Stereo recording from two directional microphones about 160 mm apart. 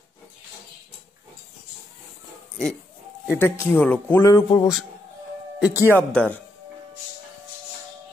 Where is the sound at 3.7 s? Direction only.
10° left (ahead or behind).